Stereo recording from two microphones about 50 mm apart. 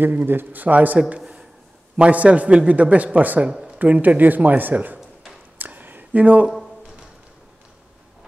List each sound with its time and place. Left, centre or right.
0.0 s a man's voice: right
3.4 s speech: centre
3.8 s a man's voice: right
5.6 s a sound: right